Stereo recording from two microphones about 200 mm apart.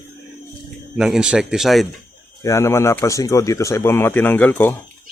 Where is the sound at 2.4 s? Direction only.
15° left (ahead or behind).